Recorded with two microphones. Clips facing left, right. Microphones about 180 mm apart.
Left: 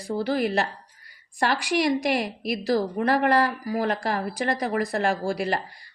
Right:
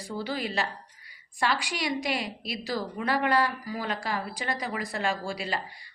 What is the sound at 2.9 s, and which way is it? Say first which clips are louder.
Speech: left 2 dB; 50° left (ahead or behind).